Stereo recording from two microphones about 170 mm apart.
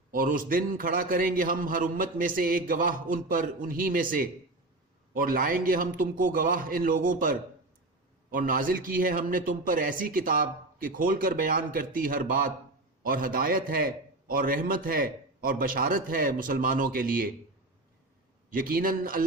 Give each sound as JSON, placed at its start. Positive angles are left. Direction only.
{"t": 0.1, "sound": "a man's voice", "side_deg": -55}
{"t": 18.5, "sound": "a man's voice", "side_deg": -55}